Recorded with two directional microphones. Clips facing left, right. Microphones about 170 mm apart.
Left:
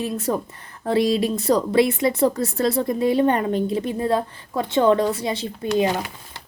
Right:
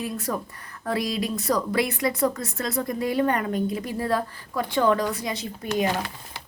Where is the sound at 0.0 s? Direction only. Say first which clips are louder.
Left 5 dB; 25° left (ahead or behind).